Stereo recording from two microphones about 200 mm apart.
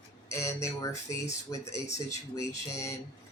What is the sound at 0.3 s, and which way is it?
Speech, 15° left (ahead or behind).